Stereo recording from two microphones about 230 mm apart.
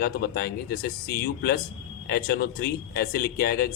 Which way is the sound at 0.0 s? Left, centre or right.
Left.